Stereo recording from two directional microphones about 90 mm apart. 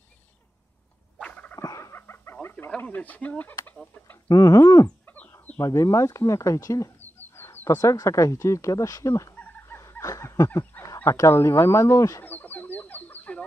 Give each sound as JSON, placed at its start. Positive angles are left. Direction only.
{"t": 1.2, "sound": "a sound", "side_deg": 15}
{"t": 1.6, "sound": "dog", "side_deg": 35}
{"t": 2.8, "sound": "speech", "side_deg": 20}
{"t": 4.3, "sound": "speech", "side_deg": 35}
{"t": 4.8, "sound": "chicken", "side_deg": 15}
{"t": 5.6, "sound": "speech", "side_deg": 35}
{"t": 7.2, "sound": "speech", "side_deg": 25}
{"t": 9.3, "sound": "chicken", "side_deg": 20}
{"t": 9.8, "sound": "a sound", "side_deg": 35}
{"t": 11.1, "sound": "speech", "side_deg": 30}
{"t": 12.3, "sound": "chicken", "side_deg": 20}